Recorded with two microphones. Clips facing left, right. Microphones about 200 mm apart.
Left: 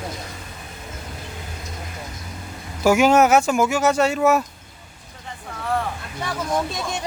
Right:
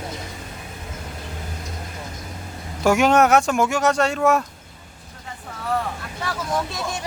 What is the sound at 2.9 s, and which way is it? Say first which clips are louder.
Speech: left 1 dB; centre (ahead or behind).